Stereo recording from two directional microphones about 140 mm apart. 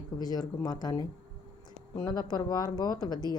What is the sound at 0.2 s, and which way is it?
Speech, 25° left (ahead or behind).